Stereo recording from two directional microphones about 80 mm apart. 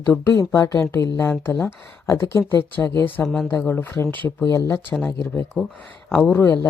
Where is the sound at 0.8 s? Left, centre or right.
Left.